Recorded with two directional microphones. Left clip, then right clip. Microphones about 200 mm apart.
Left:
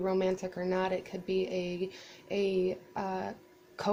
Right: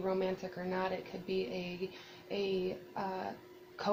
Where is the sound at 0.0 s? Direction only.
55° left (ahead or behind).